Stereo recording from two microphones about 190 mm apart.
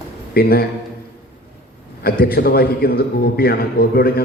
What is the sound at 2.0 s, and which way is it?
A man's voice, 55° left (ahead or behind).